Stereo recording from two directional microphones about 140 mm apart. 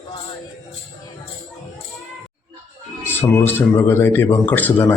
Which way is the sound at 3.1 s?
15° left (ahead or behind).